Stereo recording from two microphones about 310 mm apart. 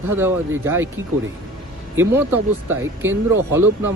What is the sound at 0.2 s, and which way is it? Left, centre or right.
Speech, centre.